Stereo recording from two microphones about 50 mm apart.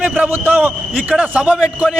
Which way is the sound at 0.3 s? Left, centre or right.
Right.